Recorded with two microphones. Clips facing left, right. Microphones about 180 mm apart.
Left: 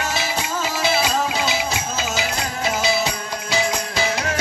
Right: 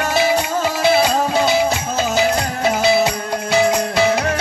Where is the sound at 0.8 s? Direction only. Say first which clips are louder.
Right 6 dB; 55° right (ahead or behind).